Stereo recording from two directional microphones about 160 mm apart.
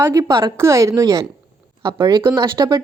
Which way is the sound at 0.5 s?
20° right (ahead or behind).